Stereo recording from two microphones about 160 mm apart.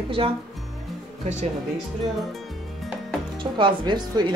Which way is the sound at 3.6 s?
30° right (ahead or behind).